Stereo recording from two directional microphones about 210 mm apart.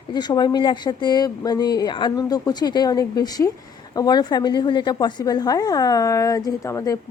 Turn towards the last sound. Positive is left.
turn(degrees=15)  # may be behind; listen again after turning